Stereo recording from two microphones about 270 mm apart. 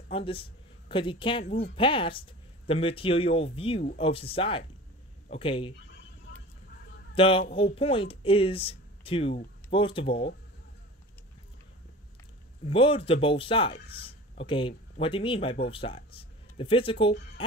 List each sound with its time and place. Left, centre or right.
0.1 s speech: centre
7.2 s speech: centre
12.6 s speech: centre